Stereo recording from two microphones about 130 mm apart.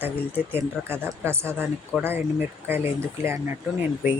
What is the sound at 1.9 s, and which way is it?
Speech, centre (ahead or behind).